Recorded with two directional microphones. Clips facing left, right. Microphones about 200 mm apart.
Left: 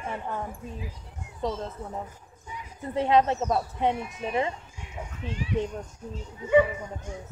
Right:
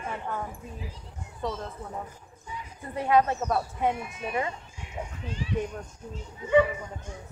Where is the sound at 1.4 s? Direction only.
25° left (ahead or behind).